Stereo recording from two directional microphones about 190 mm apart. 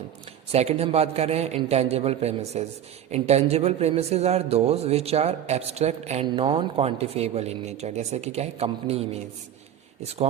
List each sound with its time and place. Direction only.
0.5 s a man's voice: 35° right (ahead or behind)